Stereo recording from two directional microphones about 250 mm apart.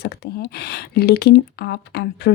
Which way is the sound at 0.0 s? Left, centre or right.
Left.